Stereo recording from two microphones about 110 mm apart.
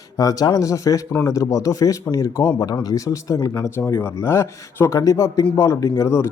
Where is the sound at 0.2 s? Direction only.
35° left (ahead or behind).